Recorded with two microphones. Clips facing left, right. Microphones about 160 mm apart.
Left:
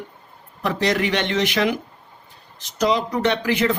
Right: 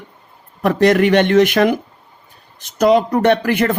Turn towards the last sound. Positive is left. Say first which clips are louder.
# right 6 dB
turn(degrees=-55)  # may be behind; listen again after turning